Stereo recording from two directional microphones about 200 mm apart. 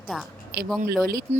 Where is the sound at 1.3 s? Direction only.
30° right (ahead or behind).